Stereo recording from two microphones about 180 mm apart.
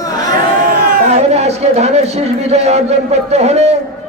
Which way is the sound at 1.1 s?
35° right (ahead or behind).